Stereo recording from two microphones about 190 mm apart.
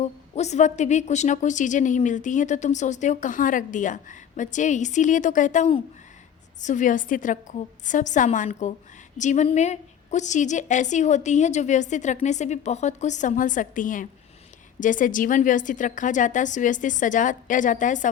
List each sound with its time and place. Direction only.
0.3 s a woman's voice: 35° left (ahead or behind)